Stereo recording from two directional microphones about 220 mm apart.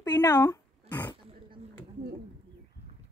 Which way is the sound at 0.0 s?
15° left (ahead or behind).